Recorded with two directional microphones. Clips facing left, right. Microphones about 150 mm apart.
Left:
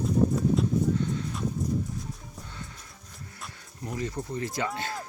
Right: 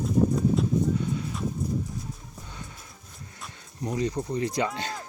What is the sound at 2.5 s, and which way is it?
Music, 15° right (ahead or behind).